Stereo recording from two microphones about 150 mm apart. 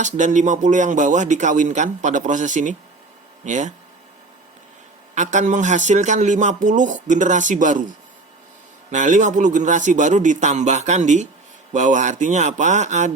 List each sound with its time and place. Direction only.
0.0 s speech: 55° right (ahead or behind)
5.1 s speech: 55° right (ahead or behind)
8.9 s speech: 55° right (ahead or behind)